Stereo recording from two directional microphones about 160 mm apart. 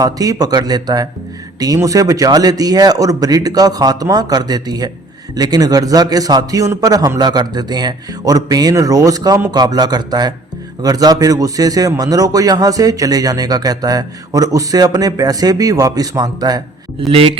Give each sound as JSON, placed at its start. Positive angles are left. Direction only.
{"t": 0.0, "sound": "a man's voice", "side_deg": -20}
{"t": 17.1, "sound": "speech", "side_deg": -35}